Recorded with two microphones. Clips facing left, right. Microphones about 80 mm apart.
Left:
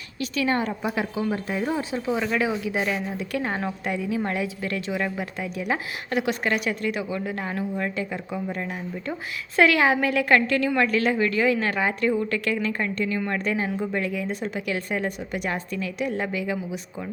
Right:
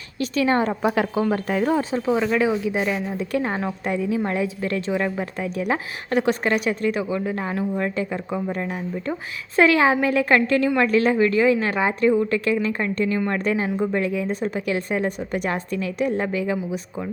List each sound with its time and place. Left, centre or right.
0.2 s a woman's voice: right
0.7 s a woman's voice: right
2.1 s speech: centre
2.4 s a woman's voice: right